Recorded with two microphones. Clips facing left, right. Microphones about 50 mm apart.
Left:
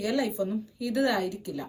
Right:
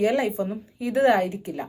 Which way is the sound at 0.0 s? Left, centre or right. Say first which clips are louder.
Right 5 dB; right.